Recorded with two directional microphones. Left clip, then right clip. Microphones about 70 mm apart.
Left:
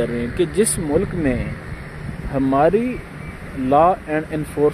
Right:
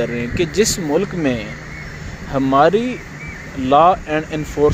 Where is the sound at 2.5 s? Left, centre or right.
Left.